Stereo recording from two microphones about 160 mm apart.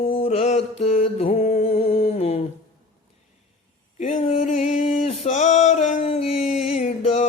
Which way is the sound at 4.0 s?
45° left (ahead or behind).